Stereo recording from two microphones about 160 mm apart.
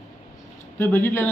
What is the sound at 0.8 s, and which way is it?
Speech, 10° left (ahead or behind).